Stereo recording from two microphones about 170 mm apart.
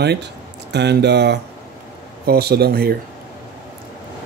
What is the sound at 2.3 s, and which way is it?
Speech, 65° right (ahead or behind).